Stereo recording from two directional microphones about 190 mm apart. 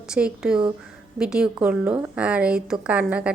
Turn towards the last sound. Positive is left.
turn(degrees=-5)  # may be behind; listen again after turning